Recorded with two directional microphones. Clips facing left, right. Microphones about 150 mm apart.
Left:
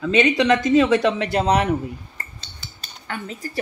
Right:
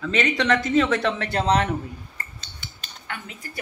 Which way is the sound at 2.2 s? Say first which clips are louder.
Left 1 dB; 35° left (ahead or behind).